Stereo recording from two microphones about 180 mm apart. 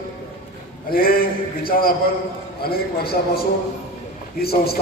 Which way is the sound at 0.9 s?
55° left (ahead or behind).